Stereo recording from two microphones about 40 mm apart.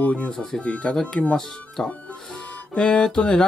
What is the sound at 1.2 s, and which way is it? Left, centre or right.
Speech, left.